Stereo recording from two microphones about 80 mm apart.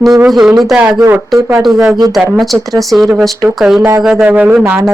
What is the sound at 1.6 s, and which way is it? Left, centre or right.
Speech, centre.